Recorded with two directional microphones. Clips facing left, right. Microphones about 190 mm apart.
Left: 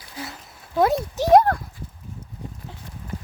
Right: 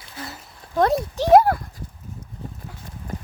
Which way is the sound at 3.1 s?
45° right (ahead or behind).